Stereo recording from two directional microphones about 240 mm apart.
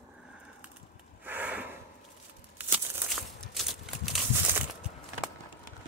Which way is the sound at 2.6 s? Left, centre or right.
Centre.